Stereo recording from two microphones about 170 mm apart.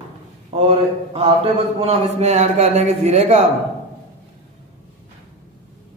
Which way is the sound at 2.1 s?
45° right (ahead or behind).